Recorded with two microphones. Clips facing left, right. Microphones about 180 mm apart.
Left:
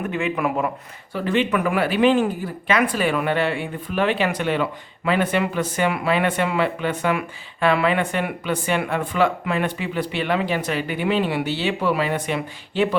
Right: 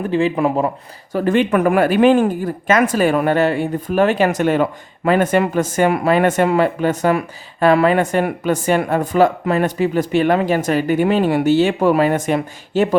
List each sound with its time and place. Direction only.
0.0 s speech: 30° right (ahead or behind)
1.1 s speech: 45° right (ahead or behind)